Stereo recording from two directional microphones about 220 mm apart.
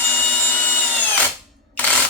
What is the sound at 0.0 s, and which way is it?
Tools, 10° left (ahead or behind).